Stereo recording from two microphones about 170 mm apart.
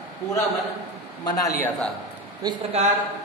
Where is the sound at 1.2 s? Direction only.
20° left (ahead or behind).